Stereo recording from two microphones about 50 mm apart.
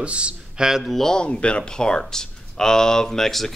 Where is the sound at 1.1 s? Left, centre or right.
Centre.